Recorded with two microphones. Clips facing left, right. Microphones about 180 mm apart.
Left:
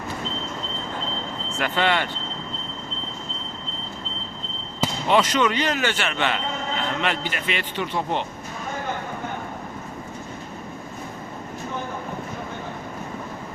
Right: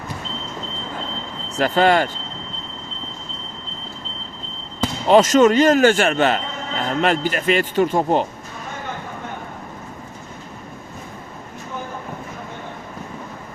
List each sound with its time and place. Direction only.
1.5 s speech: 40° right (ahead or behind)
5.0 s a man's voice: 40° right (ahead or behind)